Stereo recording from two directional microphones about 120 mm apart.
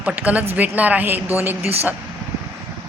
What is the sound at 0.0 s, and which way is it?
A woman's voice, 10° right (ahead or behind).